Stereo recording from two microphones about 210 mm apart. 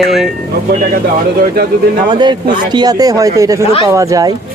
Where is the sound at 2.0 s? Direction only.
20° right (ahead or behind).